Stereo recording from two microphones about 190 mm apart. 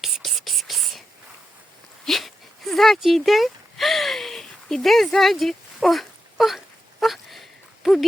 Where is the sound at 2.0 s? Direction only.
Centre (ahead or behind).